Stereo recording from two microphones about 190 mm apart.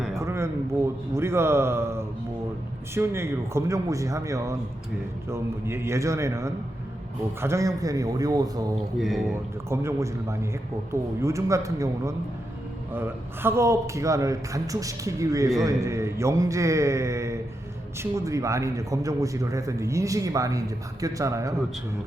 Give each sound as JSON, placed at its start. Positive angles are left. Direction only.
{"t": 0.2, "sound": "a sound", "side_deg": -15}
{"t": 1.1, "sound": "a man's voice", "side_deg": -15}
{"t": 9.0, "sound": "speech", "side_deg": 0}
{"t": 9.6, "sound": "a man's voice", "side_deg": -15}